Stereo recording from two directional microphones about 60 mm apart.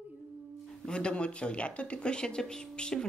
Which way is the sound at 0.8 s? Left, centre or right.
Centre.